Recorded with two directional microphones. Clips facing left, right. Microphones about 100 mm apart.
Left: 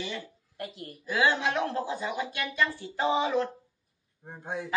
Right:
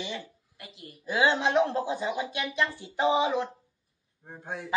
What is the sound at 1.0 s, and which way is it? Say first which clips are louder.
Speech: right 1 dB; 25° right (ahead or behind).